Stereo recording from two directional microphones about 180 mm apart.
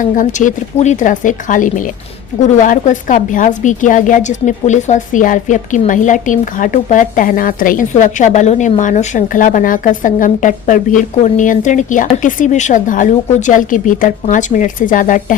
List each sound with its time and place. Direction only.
0.0 s a woman's voice: 45° left (ahead or behind)